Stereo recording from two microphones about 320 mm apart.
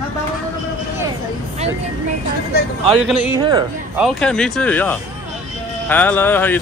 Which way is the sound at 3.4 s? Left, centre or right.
Centre.